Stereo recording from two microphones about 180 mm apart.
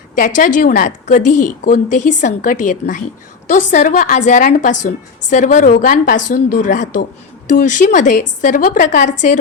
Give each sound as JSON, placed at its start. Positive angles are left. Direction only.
{"t": 0.2, "sound": "a woman's voice", "side_deg": 45}